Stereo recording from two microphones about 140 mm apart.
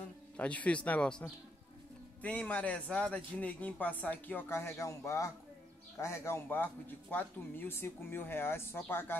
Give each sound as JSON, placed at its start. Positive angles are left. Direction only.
{"t": 0.4, "sound": "speech", "side_deg": 10}
{"t": 2.2, "sound": "speech", "side_deg": 10}